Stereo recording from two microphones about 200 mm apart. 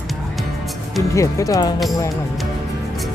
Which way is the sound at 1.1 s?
15° left (ahead or behind).